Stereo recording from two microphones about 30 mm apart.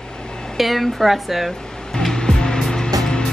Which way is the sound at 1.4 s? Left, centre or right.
Centre.